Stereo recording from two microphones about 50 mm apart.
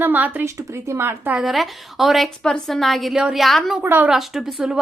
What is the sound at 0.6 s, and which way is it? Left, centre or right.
Speech, right.